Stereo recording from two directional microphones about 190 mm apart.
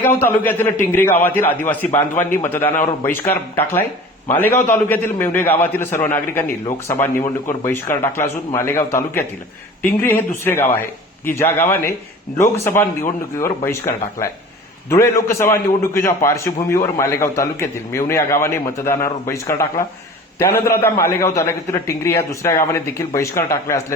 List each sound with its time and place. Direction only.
0.2 s a man's voice: 10° left (ahead or behind)